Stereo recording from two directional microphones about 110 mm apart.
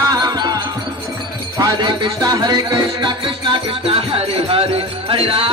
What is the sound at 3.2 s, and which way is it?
Music, 55° right (ahead or behind).